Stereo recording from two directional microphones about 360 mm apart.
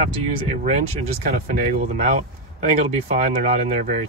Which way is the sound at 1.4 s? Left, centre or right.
Centre.